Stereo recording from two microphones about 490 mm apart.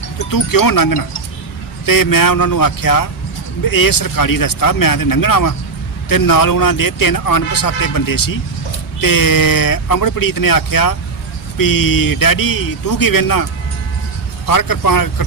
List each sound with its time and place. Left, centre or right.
0.3 s speech: left